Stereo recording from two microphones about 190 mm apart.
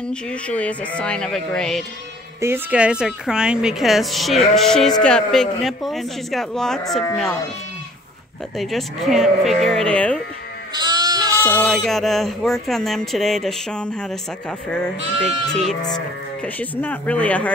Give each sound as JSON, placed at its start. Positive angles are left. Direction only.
{"t": 0.1, "sound": "speech", "side_deg": 5}
{"t": 2.4, "sound": "speech", "side_deg": -10}
{"t": 8.5, "sound": "speech", "side_deg": 0}
{"t": 10.8, "sound": "goat", "side_deg": -20}
{"t": 11.3, "sound": "speech", "side_deg": 10}
{"t": 15.4, "sound": "speech", "side_deg": 0}